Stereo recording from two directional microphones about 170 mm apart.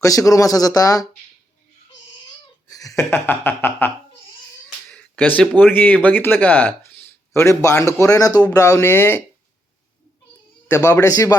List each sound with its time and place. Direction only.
0.0 s speech: 20° left (ahead or behind)
2.6 s a sound: 20° left (ahead or behind)
4.9 s a man's voice: 10° left (ahead or behind)
10.7 s a man's voice: 15° left (ahead or behind)